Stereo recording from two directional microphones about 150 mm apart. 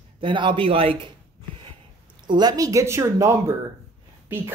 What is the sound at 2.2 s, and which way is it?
Speech, 30° right (ahead or behind).